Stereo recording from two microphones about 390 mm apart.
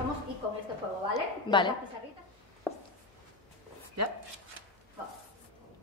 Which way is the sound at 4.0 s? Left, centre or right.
Right.